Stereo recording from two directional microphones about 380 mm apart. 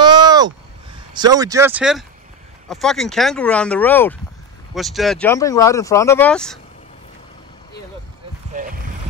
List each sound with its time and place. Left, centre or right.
0.0 s a sound: centre
1.1 s speech: centre
8.5 s boat: right